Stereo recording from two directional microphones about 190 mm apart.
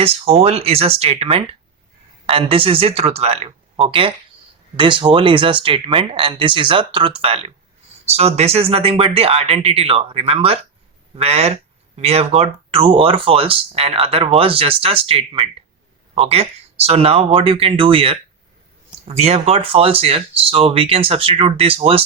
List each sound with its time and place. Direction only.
0.0 s speech: 30° right (ahead or behind)